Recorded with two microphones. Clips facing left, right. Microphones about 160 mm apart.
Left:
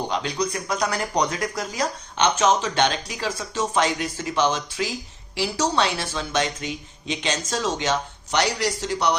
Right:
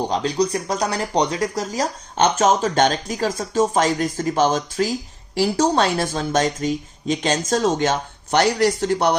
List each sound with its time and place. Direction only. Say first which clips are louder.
0.0 s speech: right 5 dB; 35° right (ahead or behind); by 9.1 s 50° right (ahead or behind)